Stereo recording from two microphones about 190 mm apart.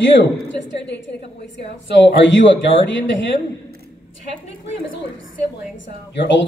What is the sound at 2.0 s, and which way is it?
Speech, 75° left (ahead or behind).